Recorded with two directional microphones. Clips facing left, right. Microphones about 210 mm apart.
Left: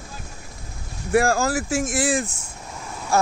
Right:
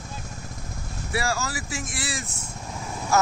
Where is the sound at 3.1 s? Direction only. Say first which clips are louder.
Left 1 dB; 30° left (ahead or behind).